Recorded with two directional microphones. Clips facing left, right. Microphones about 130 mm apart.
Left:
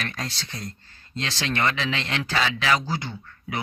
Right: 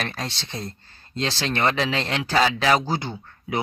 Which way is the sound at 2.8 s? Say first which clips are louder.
Right 4 dB; 25° right (ahead or behind).